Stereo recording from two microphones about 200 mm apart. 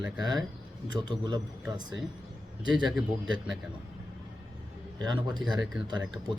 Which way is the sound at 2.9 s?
Centre (ahead or behind).